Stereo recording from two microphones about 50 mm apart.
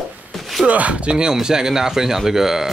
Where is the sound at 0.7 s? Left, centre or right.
Right.